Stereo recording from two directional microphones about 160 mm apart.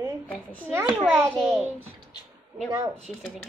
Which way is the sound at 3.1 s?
5° right (ahead or behind).